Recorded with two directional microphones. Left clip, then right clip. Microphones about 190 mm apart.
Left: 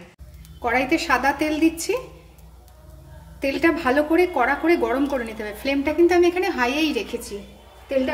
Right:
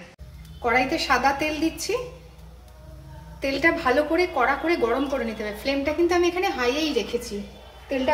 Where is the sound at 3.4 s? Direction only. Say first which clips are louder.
Left 1 dB; 35° left (ahead or behind).